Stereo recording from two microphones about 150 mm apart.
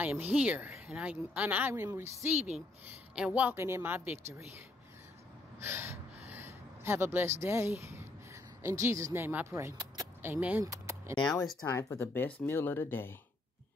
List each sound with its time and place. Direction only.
0.0 s a woman's voice: 10° right (ahead or behind)
5.6 s gasp: 15° right (ahead or behind)
8.6 s a woman's voice: 20° right (ahead or behind)
10.6 s a sound: 20° right (ahead or behind)
11.6 s speech: 15° left (ahead or behind)